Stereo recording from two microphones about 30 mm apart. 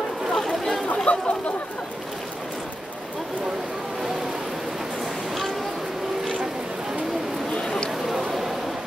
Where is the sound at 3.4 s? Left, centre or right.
Centre.